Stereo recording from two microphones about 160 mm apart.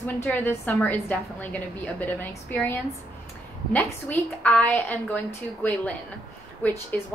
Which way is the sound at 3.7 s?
10° left (ahead or behind).